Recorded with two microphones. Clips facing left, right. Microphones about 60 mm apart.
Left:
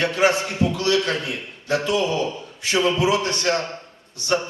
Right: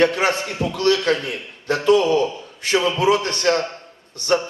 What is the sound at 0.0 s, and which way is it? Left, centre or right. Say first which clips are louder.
A man's voice: right 1 dB; right.